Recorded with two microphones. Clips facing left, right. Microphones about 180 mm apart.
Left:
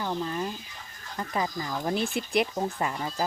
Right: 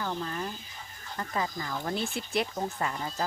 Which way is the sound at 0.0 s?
20° left (ahead or behind).